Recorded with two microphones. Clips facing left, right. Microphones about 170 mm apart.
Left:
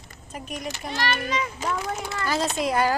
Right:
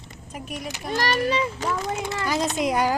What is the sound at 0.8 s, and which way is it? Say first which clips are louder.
Speech: right 5 dB; 45° right (ahead or behind).